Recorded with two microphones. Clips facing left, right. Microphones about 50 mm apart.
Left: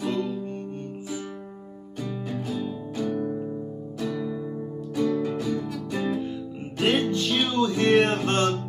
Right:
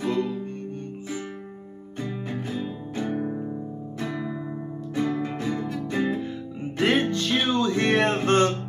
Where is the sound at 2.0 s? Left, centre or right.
Right.